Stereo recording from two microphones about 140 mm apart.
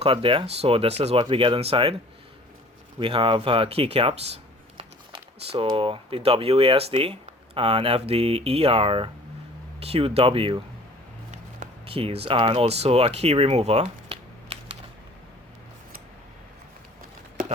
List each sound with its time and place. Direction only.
0.0 s speech: 40° right (ahead or behind)
3.0 s speech: 40° right (ahead or behind)
11.9 s speech: 40° right (ahead or behind)